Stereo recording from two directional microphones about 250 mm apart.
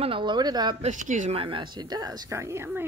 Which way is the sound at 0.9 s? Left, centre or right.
Right.